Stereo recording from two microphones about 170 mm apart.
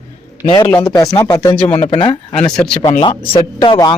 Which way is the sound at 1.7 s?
35° left (ahead or behind).